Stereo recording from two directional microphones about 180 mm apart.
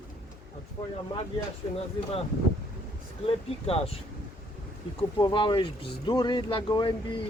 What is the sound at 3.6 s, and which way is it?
Speech, 35° left (ahead or behind).